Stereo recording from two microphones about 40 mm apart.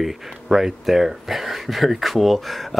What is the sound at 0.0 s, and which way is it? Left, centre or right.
Speech, centre.